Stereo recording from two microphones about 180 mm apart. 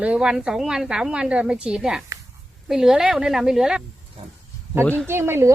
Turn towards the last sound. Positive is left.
turn(degrees=-15)  # may be behind; listen again after turning